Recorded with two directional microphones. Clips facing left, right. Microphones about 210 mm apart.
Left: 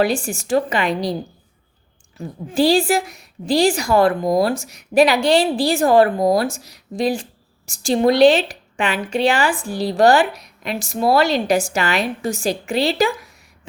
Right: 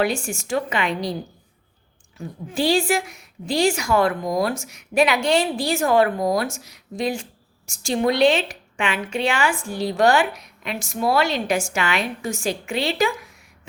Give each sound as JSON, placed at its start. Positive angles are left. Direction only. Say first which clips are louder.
{"t": 0.0, "sound": "a woman's voice", "louder": "left 4 dB", "side_deg": 35}
{"t": 2.1, "sound": "a woman's voice", "louder": "left 6 dB", "side_deg": 35}